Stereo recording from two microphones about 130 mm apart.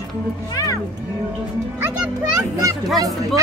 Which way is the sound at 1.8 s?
10° right (ahead or behind).